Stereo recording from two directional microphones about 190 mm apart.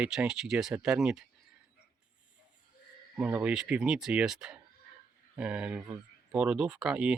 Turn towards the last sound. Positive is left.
turn(degrees=-5)  # may be behind; listen again after turning